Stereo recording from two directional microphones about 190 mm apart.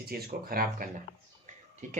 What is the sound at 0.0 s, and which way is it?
Speech, 50° right (ahead or behind).